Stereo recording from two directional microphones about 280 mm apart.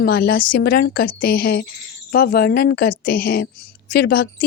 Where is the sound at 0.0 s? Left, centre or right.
Left.